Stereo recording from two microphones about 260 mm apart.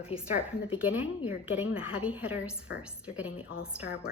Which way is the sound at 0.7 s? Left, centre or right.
Centre.